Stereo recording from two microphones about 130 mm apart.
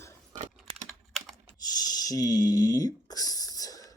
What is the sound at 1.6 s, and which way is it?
Speech, 30° left (ahead or behind).